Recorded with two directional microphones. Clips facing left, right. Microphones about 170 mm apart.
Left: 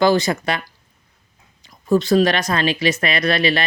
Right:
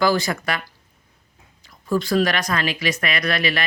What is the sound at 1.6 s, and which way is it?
Speech, 25° left (ahead or behind).